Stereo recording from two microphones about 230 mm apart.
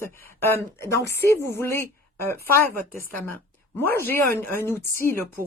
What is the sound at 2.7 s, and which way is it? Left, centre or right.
Speech, right.